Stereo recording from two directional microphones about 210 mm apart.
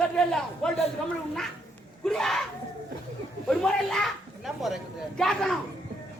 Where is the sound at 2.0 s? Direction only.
Centre (ahead or behind).